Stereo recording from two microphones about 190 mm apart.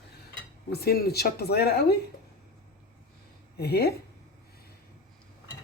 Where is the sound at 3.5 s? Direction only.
55° left (ahead or behind).